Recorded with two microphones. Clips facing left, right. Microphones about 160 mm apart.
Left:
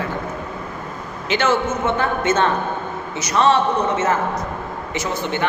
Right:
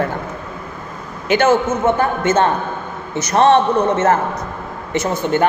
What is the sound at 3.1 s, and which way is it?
A man's voice, 55° right (ahead or behind).